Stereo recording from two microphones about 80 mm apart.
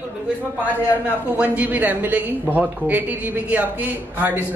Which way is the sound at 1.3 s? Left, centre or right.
Centre.